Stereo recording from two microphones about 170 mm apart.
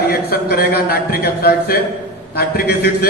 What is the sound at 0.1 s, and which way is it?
A man's voice, 65° left (ahead or behind).